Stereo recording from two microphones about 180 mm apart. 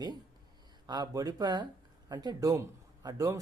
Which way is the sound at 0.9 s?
20° right (ahead or behind).